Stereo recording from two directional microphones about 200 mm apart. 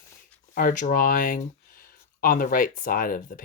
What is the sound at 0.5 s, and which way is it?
Speech, 40° left (ahead or behind).